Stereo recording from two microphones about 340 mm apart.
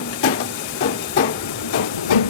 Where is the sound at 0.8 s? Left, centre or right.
Left.